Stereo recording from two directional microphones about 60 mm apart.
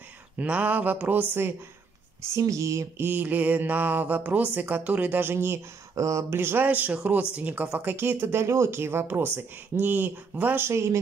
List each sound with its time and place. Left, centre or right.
0.4 s speech: right
2.3 s speech: right
3.0 s a sound: right
5.9 s speech: right
6.3 s speech: right
7.9 s speech: right
9.0 s a sound: right
10.7 s speech: right